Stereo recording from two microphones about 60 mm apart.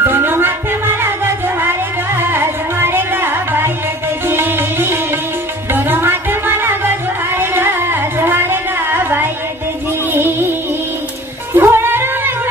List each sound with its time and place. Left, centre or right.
0.0 s music: right
11.5 s music: right